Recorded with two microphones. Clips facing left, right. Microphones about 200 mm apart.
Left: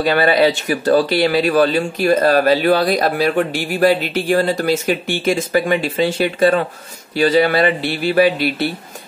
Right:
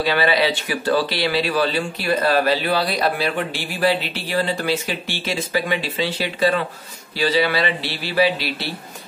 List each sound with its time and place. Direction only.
0.0 s speech: 45° left (ahead or behind)